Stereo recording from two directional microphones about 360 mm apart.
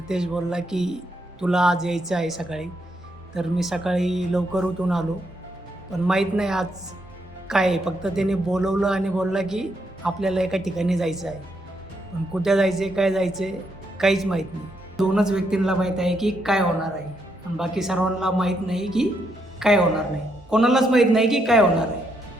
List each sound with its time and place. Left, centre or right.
0.1 s speech: centre
6.1 s speech: centre
12.4 s speech: centre